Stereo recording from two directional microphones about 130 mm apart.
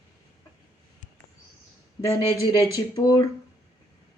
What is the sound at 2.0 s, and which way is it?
Speech, 30° left (ahead or behind).